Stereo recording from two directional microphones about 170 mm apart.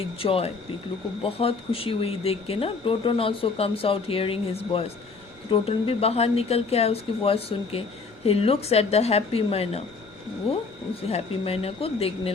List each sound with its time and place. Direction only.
0.0 s speech: 35° left (ahead or behind)